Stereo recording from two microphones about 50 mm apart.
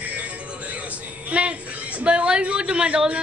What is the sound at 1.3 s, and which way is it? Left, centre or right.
A man's voice, right.